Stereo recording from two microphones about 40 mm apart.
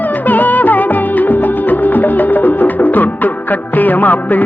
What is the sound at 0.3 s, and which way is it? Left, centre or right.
Music, left.